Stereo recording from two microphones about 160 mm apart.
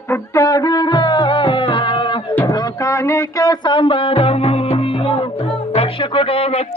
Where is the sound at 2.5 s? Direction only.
20° left (ahead or behind).